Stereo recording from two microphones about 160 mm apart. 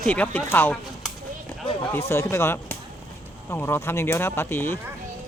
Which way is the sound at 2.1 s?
15° left (ahead or behind).